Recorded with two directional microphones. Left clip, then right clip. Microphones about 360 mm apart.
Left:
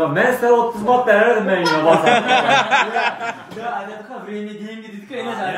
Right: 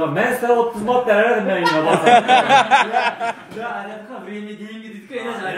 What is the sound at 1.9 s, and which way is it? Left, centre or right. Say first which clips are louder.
A man's voice: right 1 dB; centre.